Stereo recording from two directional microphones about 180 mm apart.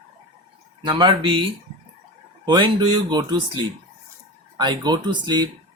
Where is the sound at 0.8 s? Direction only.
25° right (ahead or behind).